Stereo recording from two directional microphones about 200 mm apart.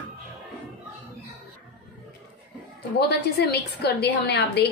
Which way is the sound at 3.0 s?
55° left (ahead or behind).